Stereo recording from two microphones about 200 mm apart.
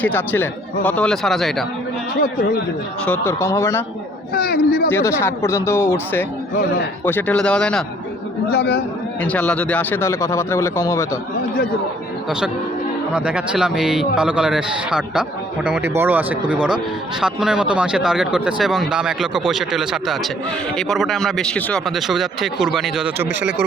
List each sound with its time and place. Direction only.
0.0 s speech: 10° left (ahead or behind)
3.1 s speech: 15° left (ahead or behind)
4.4 s a man's voice: 50° left (ahead or behind)
4.9 s speech: 10° left (ahead or behind)
8.4 s speech: 55° left (ahead or behind)
9.2 s speech: 5° left (ahead or behind)
13.1 s speech: 5° right (ahead or behind)